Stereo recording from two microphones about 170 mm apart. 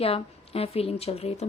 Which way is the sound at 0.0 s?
35° left (ahead or behind).